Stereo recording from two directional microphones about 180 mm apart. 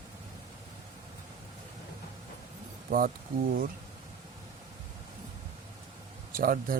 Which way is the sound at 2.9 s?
55° right (ahead or behind).